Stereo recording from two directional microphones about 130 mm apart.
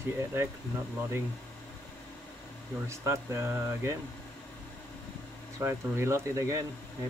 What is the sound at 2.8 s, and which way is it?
Speech, 20° right (ahead or behind).